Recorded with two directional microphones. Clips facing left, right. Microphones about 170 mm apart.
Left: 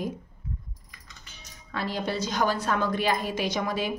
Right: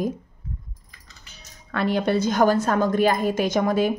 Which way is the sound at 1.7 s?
60° right (ahead or behind).